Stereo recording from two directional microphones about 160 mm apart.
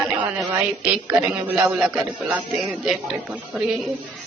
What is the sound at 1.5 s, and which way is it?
A man's voice, 5° right (ahead or behind).